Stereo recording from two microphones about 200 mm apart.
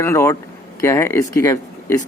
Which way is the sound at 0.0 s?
15° left (ahead or behind).